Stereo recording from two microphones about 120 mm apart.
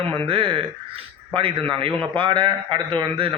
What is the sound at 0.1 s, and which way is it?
A man's voice, 45° right (ahead or behind).